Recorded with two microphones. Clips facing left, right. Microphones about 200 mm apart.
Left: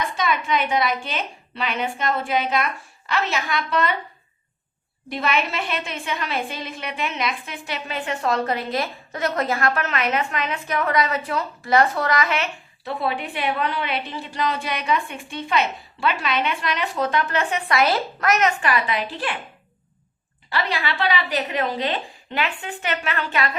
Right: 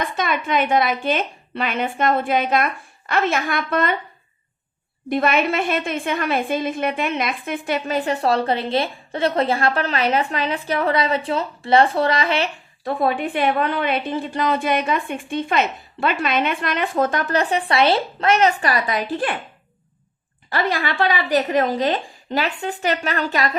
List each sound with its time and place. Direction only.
0.0 s a woman's voice: 55° right (ahead or behind)
5.0 s a woman's voice: 50° right (ahead or behind); by 12.5 s 30° right (ahead or behind)
12.8 s a woman's voice: 50° right (ahead or behind)
20.5 s a woman's voice: 45° right (ahead or behind)